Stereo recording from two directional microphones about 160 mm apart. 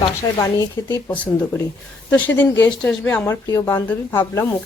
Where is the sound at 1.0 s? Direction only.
10° left (ahead or behind).